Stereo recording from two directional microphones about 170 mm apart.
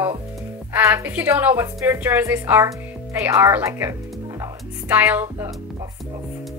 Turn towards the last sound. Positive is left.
turn(degrees=-10)  # may be behind; listen again after turning